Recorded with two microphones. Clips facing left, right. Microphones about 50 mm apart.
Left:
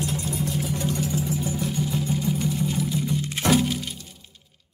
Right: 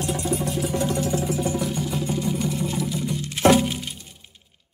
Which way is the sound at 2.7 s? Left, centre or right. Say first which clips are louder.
Even; centre.